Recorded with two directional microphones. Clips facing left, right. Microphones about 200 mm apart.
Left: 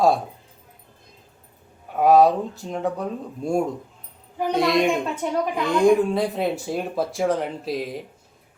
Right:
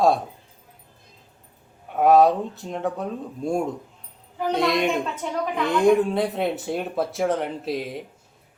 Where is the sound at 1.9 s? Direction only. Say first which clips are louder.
Left 1 dB; centre (ahead or behind).